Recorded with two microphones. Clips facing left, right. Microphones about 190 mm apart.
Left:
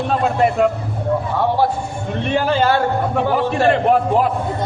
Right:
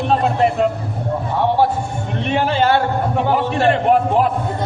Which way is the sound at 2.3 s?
40° left (ahead or behind).